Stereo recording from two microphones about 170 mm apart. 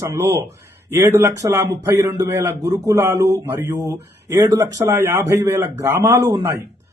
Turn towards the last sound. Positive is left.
turn(degrees=-15)  # may be behind; listen again after turning